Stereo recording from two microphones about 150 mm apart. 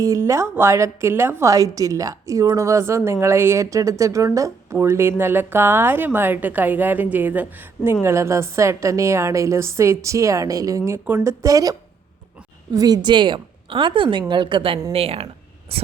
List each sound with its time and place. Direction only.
0.0 s a woman's voice: 20° right (ahead or behind); by 15.9 s 40° right (ahead or behind)